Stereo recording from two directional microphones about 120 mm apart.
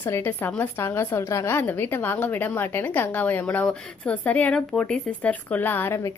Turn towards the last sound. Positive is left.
turn(degrees=15)  # may be behind; listen again after turning